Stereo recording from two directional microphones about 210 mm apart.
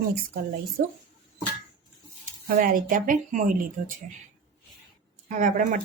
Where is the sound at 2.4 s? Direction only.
40° right (ahead or behind).